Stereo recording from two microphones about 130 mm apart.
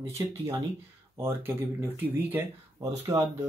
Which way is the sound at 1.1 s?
20° right (ahead or behind).